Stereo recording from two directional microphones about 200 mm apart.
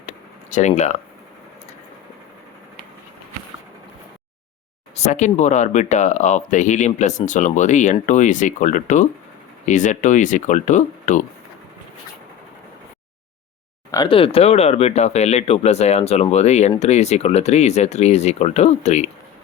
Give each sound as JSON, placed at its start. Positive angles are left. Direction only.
{"t": 0.5, "sound": "speech", "side_deg": 35}
{"t": 4.9, "sound": "speech", "side_deg": 35}
{"t": 13.9, "sound": "speech", "side_deg": 25}